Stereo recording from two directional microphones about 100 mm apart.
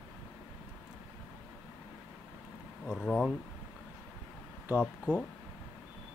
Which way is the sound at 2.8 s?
5° right (ahead or behind).